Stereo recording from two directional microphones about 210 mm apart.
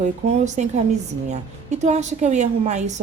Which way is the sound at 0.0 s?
35° right (ahead or behind).